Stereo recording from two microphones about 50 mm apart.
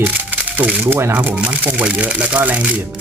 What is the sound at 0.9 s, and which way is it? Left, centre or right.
Speech, right.